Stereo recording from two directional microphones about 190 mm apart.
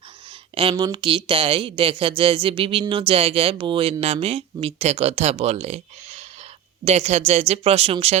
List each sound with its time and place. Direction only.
0.5 s speech: 25° right (ahead or behind)